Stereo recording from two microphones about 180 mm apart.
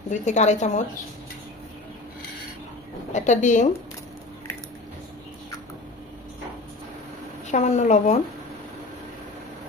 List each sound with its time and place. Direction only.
0.1 s a woman's voice: 40° left (ahead or behind)
3.1 s a woman's voice: 40° left (ahead or behind)
7.4 s a woman's voice: 40° left (ahead or behind)